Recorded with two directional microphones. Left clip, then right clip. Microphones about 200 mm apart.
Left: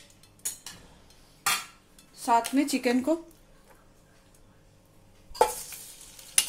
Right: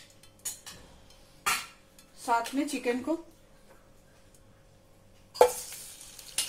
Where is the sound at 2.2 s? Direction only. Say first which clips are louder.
Left 4 dB; 45° left (ahead or behind).